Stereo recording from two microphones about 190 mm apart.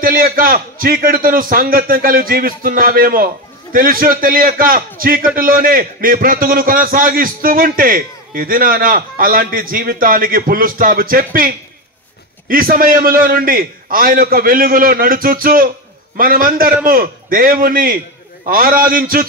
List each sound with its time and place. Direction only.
0.0 s a man's voice: 50° right (ahead or behind)